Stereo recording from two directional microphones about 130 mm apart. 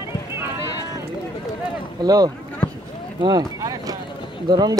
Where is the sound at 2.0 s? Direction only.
30° right (ahead or behind).